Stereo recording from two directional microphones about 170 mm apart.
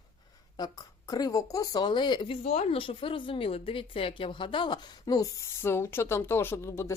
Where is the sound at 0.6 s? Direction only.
20° left (ahead or behind).